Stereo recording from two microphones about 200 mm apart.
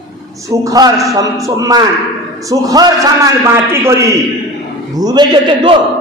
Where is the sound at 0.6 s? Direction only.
20° right (ahead or behind).